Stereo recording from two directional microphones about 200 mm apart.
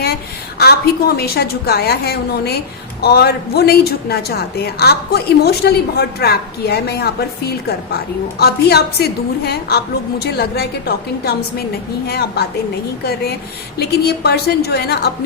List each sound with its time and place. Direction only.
0.6 s a woman's voice: 50° left (ahead or behind)
13.7 s a woman's voice: 55° left (ahead or behind)